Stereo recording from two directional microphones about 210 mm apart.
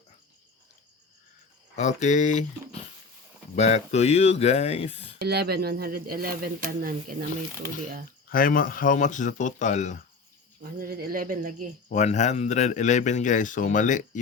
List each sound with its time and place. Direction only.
1.7 s speech: 35° left (ahead or behind)
3.5 s speech: 30° left (ahead or behind)
5.2 s speech: 50° right (ahead or behind)
8.3 s speech: 40° left (ahead or behind)
10.6 s speech: 45° right (ahead or behind)
11.9 s speech: 35° left (ahead or behind)